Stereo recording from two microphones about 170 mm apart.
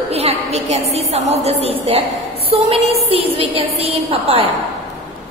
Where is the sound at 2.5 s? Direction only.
35° right (ahead or behind).